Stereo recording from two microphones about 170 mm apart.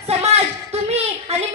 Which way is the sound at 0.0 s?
40° right (ahead or behind).